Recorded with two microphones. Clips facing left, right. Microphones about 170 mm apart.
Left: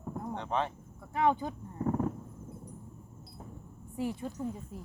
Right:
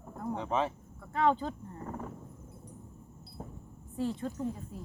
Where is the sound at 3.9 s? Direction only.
15° left (ahead or behind).